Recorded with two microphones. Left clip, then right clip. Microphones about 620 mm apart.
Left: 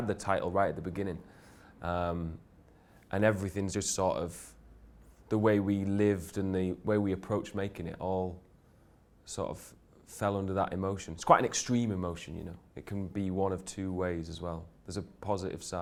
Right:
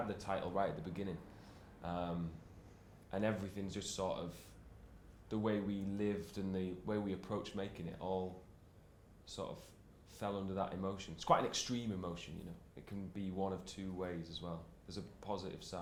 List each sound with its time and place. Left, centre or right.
0.1 s speech: left